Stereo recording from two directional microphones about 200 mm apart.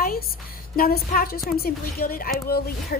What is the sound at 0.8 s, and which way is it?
Speech, 50° left (ahead or behind).